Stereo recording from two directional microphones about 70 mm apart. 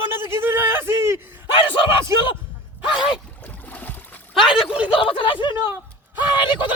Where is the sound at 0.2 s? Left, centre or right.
Right.